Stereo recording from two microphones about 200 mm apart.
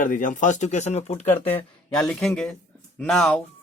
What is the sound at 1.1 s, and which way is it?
Speech, 10° left (ahead or behind).